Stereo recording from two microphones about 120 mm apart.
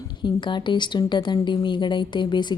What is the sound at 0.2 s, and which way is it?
A woman's voice, 40° left (ahead or behind).